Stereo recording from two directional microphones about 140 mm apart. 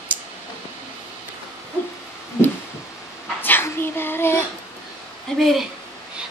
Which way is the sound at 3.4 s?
15° left (ahead or behind).